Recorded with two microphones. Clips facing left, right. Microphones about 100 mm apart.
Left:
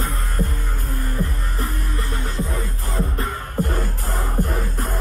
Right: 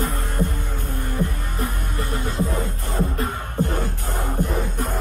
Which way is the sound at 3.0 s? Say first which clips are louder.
Right 2 dB; 40° left (ahead or behind).